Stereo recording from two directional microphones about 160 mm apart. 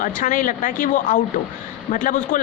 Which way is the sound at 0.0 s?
55° left (ahead or behind).